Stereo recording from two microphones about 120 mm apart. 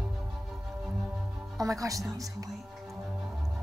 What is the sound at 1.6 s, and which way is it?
Speech, 30° right (ahead or behind).